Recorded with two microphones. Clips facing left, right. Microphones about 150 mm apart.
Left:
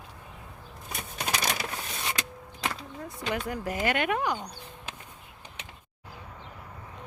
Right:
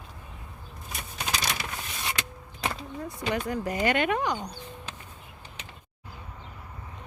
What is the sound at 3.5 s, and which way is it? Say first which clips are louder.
Speech: right 3 dB; 5° left (ahead or behind).